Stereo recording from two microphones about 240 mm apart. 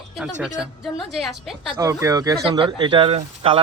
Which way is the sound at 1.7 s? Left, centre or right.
Centre.